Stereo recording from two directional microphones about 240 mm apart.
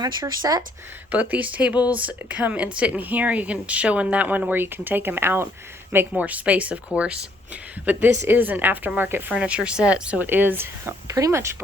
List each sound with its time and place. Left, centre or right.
0.0 s speech: centre